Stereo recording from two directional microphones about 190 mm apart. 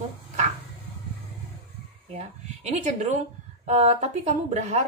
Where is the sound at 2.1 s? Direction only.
35° right (ahead or behind).